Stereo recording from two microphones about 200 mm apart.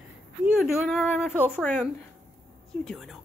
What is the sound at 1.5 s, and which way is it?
Speech, 10° left (ahead or behind).